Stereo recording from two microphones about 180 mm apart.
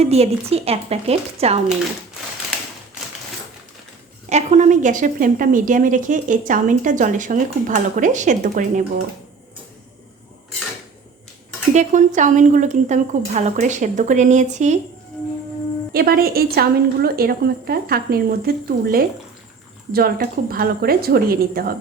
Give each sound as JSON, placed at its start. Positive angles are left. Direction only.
{"t": 0.0, "sound": "a woman's voice", "side_deg": -35}
{"t": 4.3, "sound": "a woman's voice", "side_deg": -40}
{"t": 11.7, "sound": "a woman's voice", "side_deg": -40}
{"t": 15.9, "sound": "a woman's voice", "side_deg": -55}